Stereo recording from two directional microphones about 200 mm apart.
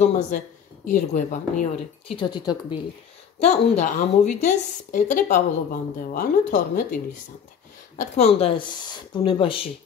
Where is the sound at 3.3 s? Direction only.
35° left (ahead or behind).